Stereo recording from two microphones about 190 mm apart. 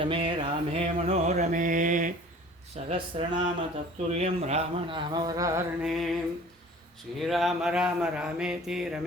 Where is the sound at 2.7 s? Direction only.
30° right (ahead or behind).